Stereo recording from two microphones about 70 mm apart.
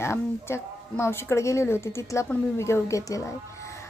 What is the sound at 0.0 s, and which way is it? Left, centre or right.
A woman's voice, left.